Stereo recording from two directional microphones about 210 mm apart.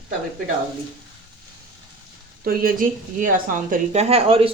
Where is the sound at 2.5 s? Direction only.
40° right (ahead or behind).